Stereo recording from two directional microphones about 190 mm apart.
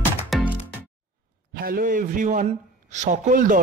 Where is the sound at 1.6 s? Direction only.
50° right (ahead or behind).